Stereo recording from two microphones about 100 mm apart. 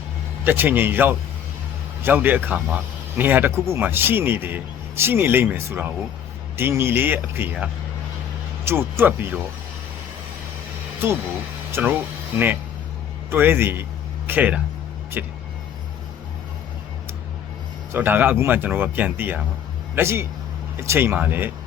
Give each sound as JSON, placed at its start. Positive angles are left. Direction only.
{"t": 0.4, "sound": "speech", "side_deg": -20}
{"t": 11.0, "sound": "speech", "side_deg": -20}
{"t": 17.9, "sound": "speech", "side_deg": -20}